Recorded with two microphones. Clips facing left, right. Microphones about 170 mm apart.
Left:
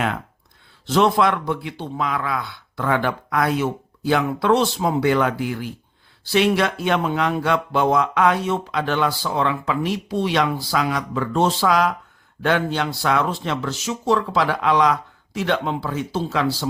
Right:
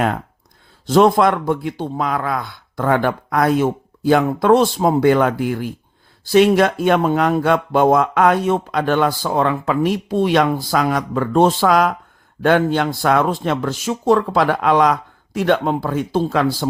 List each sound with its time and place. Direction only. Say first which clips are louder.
0.9 s speech: right 5 dB; 45° right (ahead or behind)